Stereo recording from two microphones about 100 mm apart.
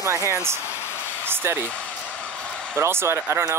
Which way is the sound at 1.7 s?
15° left (ahead or behind).